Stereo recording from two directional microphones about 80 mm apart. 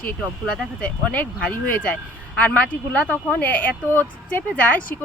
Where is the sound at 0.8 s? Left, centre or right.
Centre.